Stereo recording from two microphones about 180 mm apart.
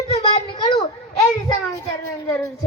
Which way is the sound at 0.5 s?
20° left (ahead or behind).